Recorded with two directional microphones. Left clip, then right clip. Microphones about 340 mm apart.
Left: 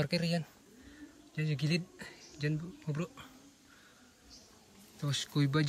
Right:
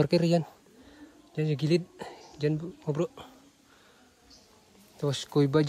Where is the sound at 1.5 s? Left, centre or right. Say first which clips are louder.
Right 9 dB; centre.